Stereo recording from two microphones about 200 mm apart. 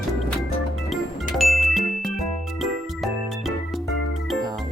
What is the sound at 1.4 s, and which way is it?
Ding, centre (ahead or behind).